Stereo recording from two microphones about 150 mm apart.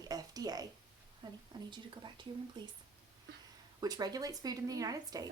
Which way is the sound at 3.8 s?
25° right (ahead or behind).